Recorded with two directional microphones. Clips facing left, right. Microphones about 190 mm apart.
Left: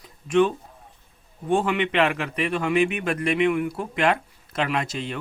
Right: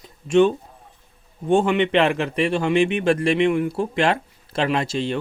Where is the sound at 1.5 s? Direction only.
25° right (ahead or behind).